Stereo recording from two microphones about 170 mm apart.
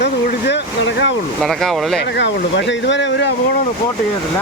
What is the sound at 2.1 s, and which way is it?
Speech, 90° left.